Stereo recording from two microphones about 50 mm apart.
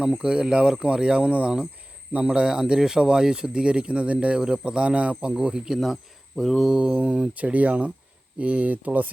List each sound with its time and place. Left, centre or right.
0.0 s speech: centre
6.3 s mantra: centre
6.6 s speech: centre; by 9.0 s right